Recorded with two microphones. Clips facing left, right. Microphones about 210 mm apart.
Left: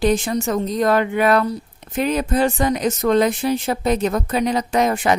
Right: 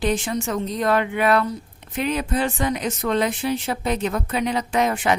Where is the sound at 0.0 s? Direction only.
40° left (ahead or behind).